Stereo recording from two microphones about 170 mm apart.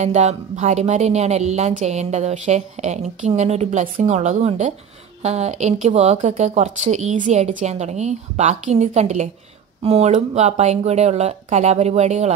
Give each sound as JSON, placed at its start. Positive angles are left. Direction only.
{"t": 0.0, "sound": "speech", "side_deg": -40}